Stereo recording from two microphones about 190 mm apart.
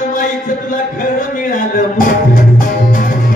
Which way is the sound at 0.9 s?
45° left (ahead or behind).